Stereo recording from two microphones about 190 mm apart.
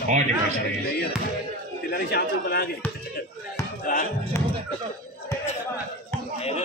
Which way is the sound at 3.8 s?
45° left (ahead or behind).